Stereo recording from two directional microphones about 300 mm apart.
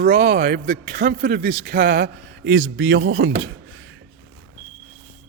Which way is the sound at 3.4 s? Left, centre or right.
Right.